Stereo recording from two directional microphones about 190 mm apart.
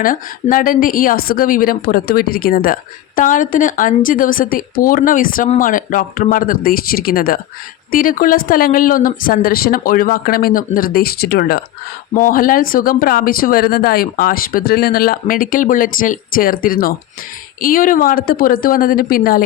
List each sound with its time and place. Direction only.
0.0 s a woman's voice: 45° left (ahead or behind)